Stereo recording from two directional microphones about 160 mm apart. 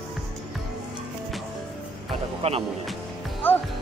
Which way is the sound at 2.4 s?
40° right (ahead or behind).